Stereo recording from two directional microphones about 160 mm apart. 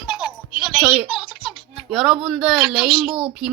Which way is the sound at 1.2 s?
30° left (ahead or behind).